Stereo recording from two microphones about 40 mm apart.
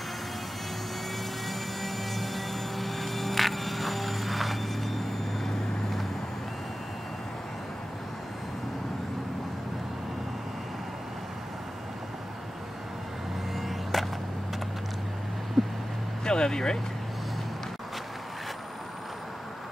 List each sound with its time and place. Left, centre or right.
1.5 s music: centre
5.4 s vehicle: centre
13.6 s vehicle: centre
15.6 s vehicle: centre
16.3 s speech: centre